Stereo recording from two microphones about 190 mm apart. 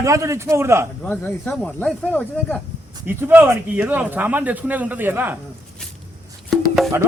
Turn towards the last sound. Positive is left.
turn(degrees=0)  # may be behind; listen again after turning